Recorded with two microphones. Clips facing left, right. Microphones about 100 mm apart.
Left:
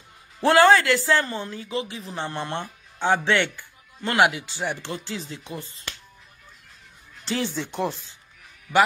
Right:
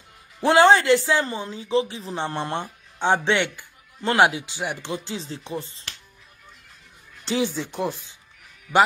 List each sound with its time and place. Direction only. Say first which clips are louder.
0.4 s speech: right 1 dB; 15° right (ahead or behind)
7.2 s speech: right 3 dB; 15° right (ahead or behind)
7.5 s speech: even; centre (ahead or behind)